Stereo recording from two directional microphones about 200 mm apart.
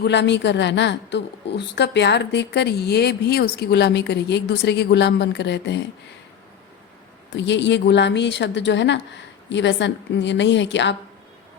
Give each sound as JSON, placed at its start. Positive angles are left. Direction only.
{"t": 0.0, "sound": "a woman's voice", "side_deg": 60}
{"t": 7.3, "sound": "a woman's voice", "side_deg": 65}